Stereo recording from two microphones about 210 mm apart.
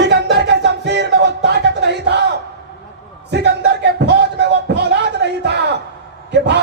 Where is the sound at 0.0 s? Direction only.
55° right (ahead or behind).